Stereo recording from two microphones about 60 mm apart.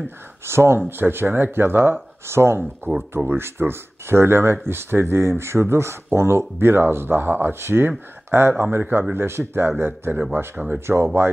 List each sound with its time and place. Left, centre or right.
0.5 s speech: right
0.7 s speech: right